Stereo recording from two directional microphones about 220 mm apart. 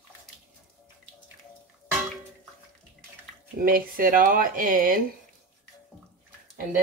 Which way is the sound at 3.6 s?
40° right (ahead or behind).